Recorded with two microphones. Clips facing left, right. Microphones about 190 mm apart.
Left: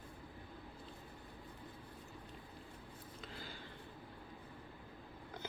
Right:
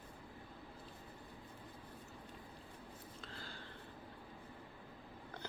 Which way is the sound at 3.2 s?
15° left (ahead or behind).